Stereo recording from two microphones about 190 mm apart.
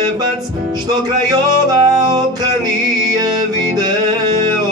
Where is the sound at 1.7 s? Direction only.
20° right (ahead or behind).